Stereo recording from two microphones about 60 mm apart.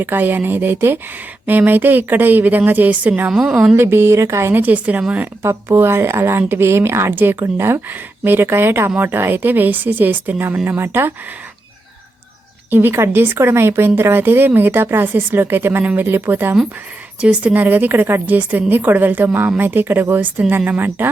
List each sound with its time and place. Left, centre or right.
0.0 s a woman's voice: right
3.3 s a woman's voice: centre
3.8 s speech: right
4.6 s a woman's voice: right
5.4 s a woman's voice: right
12.7 s a woman's voice: right
15.8 s a woman's voice: right
16.0 s a woman's voice: right
17.2 s a woman's voice: right